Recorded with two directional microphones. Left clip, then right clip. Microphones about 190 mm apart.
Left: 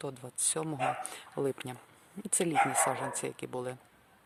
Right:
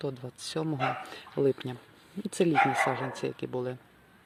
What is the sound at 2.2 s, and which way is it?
Speech, 15° left (ahead or behind).